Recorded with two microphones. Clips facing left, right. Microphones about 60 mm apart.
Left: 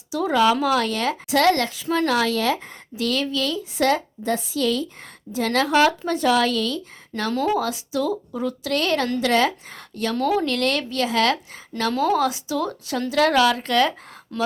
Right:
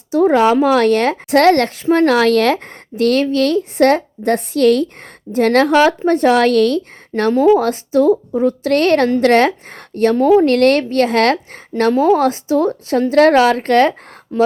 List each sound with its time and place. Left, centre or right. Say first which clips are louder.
0.1 s a woman's voice: right 7 dB; right
7.3 s speech: right 11 dB; right
7.6 s a woman's voice: right 10 dB; right
10.2 s speech: right 10 dB; right
10.4 s a woman's voice: right 11 dB; right
11.8 s a woman's voice: right 8 dB; right
14.3 s speech: right 10 dB; right